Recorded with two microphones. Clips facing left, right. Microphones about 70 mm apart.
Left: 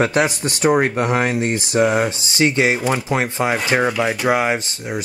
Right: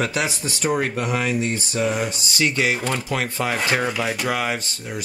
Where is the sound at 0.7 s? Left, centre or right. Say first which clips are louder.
Left 5 dB; left.